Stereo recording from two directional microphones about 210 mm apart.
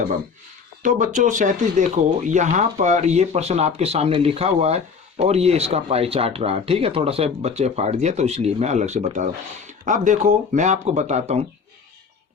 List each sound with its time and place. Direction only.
0.8 s speech: 35° right (ahead or behind)